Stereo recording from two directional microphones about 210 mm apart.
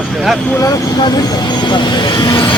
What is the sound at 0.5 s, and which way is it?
Speech, 15° left (ahead or behind).